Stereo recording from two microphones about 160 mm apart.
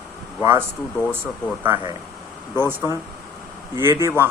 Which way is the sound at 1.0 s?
5° left (ahead or behind).